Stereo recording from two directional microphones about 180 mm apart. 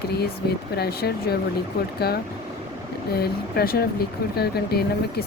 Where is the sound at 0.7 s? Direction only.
60° left (ahead or behind).